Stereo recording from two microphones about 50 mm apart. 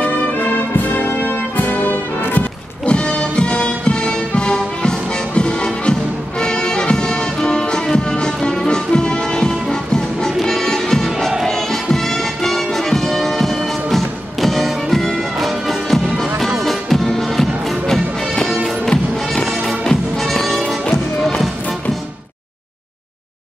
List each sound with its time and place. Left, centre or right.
0.0 s music: left
2.9 s music: left; by 11.3 s centre
12.4 s music: centre